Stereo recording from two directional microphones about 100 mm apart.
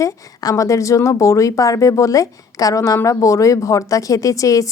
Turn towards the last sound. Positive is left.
turn(degrees=35)  # may be behind; listen again after turning